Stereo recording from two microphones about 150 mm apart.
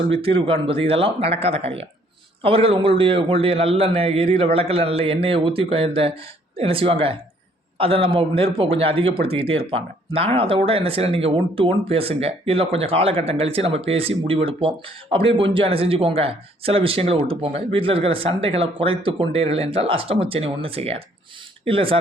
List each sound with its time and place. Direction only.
0.2 s speech: 40° right (ahead or behind)